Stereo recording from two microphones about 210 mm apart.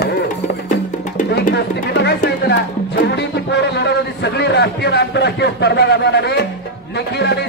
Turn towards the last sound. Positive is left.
turn(degrees=50)  # may be behind; listen again after turning